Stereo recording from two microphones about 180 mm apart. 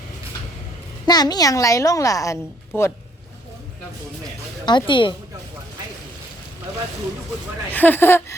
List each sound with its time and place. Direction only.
1.0 s a woman's voice: 20° left (ahead or behind)
4.6 s a woman's voice: 25° left (ahead or behind)
7.7 s speech: 10° left (ahead or behind)